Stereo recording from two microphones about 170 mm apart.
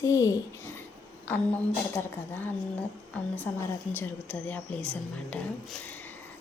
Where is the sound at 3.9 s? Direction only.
10° left (ahead or behind).